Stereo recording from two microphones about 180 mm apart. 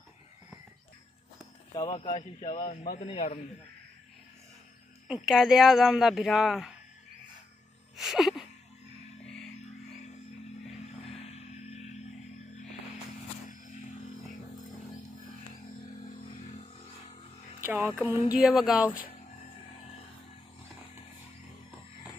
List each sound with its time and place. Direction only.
1.8 s a man's voice: 30° left (ahead or behind); by 3.0 s 50° left (ahead or behind)
3.0 s a man's voice: 35° left (ahead or behind)
5.0 s speech: centre (ahead or behind)
7.9 s a sound: centre (ahead or behind)
9.2 s music: centre (ahead or behind)
9.6 s music: 40° left (ahead or behind)
11.1 s music: 35° left (ahead or behind)
13.5 s music: 45° left (ahead or behind)
15.5 s a sound: 45° left (ahead or behind)
17.6 s music: 10° right (ahead or behind)
18.3 s speech: centre (ahead or behind)